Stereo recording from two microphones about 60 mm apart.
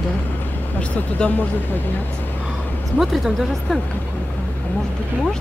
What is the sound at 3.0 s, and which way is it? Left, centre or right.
Speech, centre.